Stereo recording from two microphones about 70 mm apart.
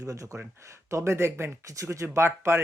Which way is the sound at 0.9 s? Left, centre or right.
Right.